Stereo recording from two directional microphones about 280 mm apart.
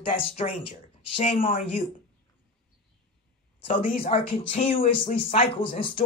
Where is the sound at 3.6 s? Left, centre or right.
Left.